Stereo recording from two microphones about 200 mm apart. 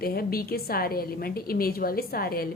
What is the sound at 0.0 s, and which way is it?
A woman's voice, 50° left (ahead or behind).